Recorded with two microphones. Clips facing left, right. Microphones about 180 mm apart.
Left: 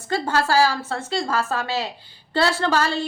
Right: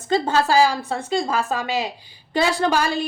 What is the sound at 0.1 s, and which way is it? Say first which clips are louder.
A woman's voice: right 3 dB; 20° right (ahead or behind).